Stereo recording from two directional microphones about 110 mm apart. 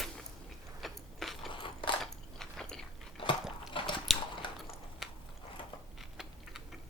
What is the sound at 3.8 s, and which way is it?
Biting, 50° left (ahead or behind).